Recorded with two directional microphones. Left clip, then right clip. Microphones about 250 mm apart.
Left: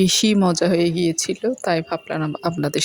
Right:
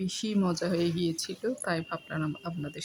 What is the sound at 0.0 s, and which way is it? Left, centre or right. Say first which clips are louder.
Speech: left 14 dB; left.